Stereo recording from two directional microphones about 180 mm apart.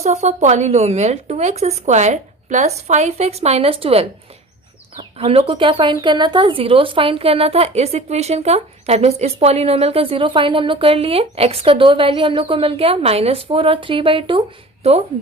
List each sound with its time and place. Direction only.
0.0 s speech: 40° right (ahead or behind)